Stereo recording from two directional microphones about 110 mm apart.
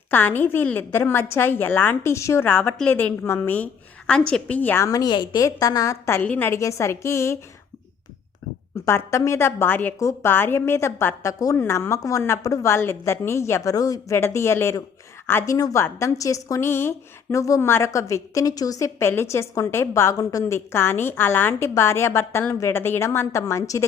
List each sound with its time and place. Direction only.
0.1 s a woman's voice: 15° left (ahead or behind)
4.8 s a woman's voice: 35° left (ahead or behind)
8.9 s a woman's voice: 25° left (ahead or behind)
11.5 s a woman's voice: 20° left (ahead or behind)